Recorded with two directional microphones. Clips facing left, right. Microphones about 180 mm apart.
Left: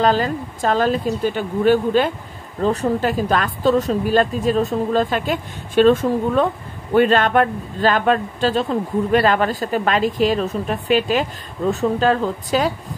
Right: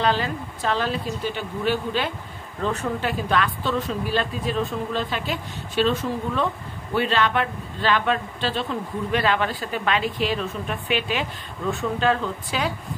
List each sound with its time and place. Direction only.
0.0 s speech: 45° left (ahead or behind)